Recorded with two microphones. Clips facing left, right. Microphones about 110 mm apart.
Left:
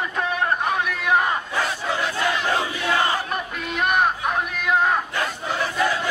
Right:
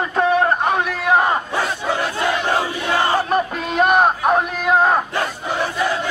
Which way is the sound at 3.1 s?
35° right (ahead or behind).